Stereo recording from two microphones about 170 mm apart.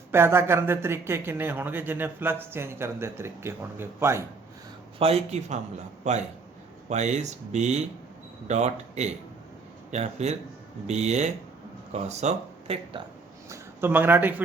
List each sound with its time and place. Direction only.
0.1 s a man's voice: 15° right (ahead or behind)
4.9 s speech: 35° right (ahead or behind)
13.5 s speech: 15° right (ahead or behind)